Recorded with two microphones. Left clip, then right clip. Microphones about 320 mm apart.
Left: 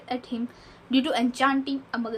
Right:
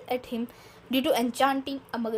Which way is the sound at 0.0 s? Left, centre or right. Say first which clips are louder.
Right 1 dB; right.